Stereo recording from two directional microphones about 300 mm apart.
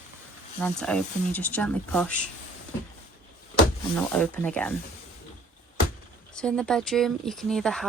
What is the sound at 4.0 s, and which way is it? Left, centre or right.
Speech, centre.